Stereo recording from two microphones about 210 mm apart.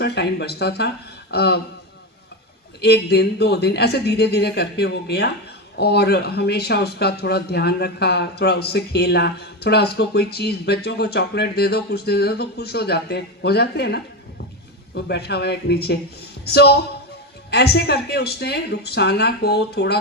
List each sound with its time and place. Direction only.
0.0 s speech: 50° left (ahead or behind)
2.8 s speech: 50° left (ahead or behind)